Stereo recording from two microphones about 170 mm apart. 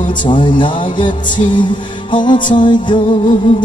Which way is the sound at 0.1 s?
30° left (ahead or behind).